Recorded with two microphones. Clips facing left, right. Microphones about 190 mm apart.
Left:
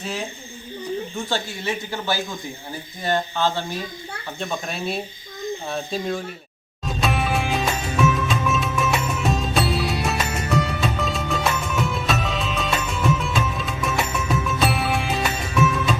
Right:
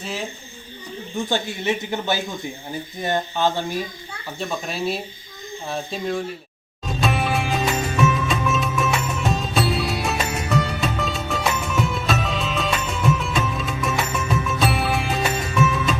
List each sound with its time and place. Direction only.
1.3 s speech: 20° right (ahead or behind)
4.4 s speech: centre (ahead or behind)
6.8 s music: centre (ahead or behind)